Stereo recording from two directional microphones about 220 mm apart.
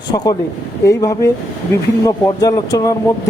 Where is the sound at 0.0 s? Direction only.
20° left (ahead or behind).